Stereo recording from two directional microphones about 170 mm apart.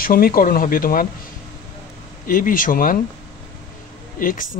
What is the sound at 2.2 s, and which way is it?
Speech, 55° left (ahead or behind).